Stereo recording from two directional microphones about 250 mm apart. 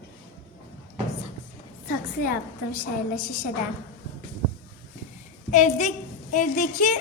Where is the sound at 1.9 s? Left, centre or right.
Left.